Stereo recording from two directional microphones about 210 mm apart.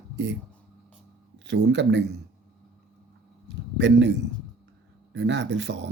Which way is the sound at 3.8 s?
55° right (ahead or behind).